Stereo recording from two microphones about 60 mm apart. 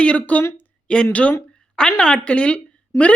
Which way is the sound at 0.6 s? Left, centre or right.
Centre.